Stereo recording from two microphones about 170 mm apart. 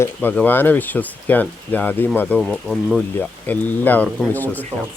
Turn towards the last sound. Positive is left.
turn(degrees=10)  # may be behind; listen again after turning